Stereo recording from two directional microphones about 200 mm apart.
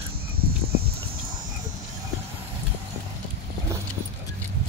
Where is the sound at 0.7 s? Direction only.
50° right (ahead or behind).